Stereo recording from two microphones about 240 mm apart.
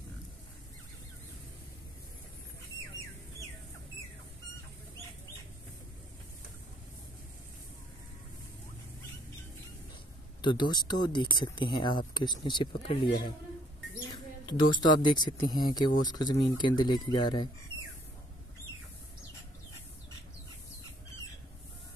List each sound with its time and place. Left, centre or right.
10.4 s speech: centre
14.1 s speech: centre